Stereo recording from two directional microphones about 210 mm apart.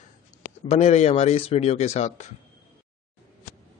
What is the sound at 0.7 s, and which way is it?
Speech, 30° left (ahead or behind).